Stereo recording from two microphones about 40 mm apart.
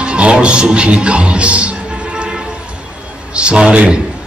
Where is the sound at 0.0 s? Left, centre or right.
Right.